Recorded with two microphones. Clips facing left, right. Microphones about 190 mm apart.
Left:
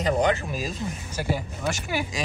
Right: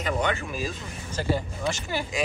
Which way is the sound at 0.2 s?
35° left (ahead or behind).